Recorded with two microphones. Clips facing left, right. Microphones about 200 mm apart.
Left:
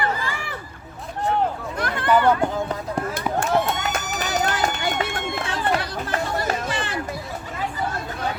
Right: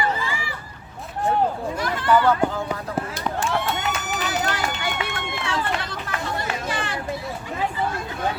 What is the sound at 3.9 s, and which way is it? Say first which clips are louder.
Run: left 1 dB; 40° left (ahead or behind).